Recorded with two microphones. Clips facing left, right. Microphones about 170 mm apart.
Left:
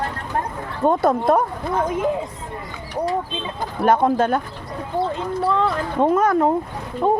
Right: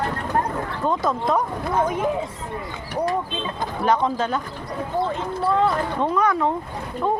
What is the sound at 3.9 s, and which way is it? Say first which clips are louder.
Speech: left 5 dB; 55° left (ahead or behind).